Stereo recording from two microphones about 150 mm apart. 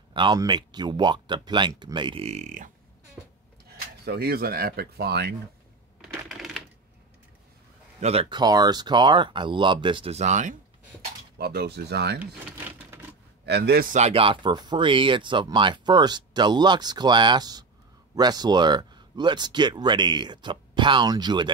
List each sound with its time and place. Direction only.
0.1 s speech: 35° right (ahead or behind); by 2.7 s 55° right (ahead or behind)
4.0 s speech: 90° right
5.9 s typing: centre (ahead or behind)
8.0 s speech: 45° right (ahead or behind)
8.3 s speech: 25° right (ahead or behind)
10.1 s speech: 50° right (ahead or behind)
11.3 s speech: 90° right
13.5 s speech: 90° right
13.9 s speech: 45° right (ahead or behind)